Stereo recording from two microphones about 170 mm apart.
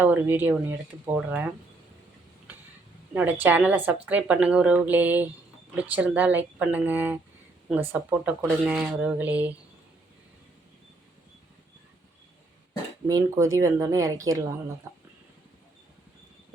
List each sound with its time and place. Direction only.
0.0 s speech: 10° right (ahead or behind)
3.2 s speech: 10° right (ahead or behind)
13.1 s speech: 20° right (ahead or behind)
14.9 s a sound: 15° right (ahead or behind)